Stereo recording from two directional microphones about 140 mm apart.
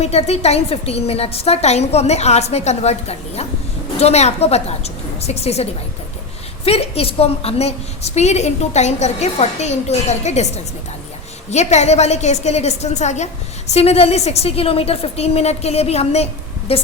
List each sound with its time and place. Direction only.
0.0 s a woman's voice: 50° left (ahead or behind)
6.7 s a woman's voice: 45° left (ahead or behind)